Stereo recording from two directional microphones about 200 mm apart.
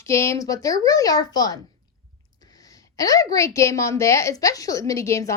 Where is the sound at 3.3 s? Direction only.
15° left (ahead or behind).